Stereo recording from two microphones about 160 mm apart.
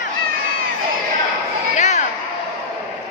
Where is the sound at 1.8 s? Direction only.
50° left (ahead or behind).